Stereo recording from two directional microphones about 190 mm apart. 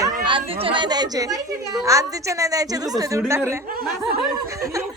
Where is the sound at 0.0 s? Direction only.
25° right (ahead or behind).